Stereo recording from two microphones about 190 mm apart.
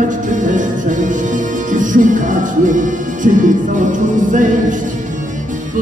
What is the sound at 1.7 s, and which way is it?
Music, 45° right (ahead or behind).